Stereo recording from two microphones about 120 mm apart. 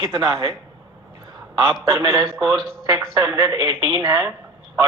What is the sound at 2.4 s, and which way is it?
A man's voice, 35° right (ahead or behind).